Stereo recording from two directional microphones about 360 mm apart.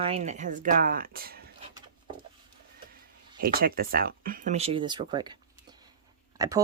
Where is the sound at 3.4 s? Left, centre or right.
Right.